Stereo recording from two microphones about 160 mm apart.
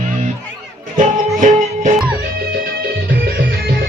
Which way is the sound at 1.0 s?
50° right (ahead or behind).